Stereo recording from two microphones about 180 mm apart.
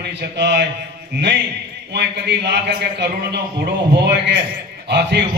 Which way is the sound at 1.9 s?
70° right (ahead or behind).